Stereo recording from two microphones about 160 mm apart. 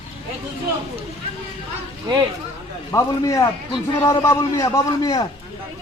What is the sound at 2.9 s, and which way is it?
A man's voice, 20° left (ahead or behind).